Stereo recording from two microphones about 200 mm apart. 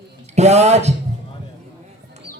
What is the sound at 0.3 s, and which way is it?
Music, 35° right (ahead or behind).